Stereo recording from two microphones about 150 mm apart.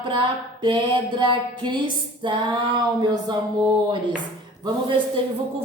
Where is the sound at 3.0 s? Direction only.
30° right (ahead or behind).